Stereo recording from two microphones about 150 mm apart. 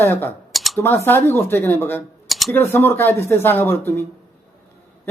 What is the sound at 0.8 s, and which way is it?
Speech, 15° left (ahead or behind).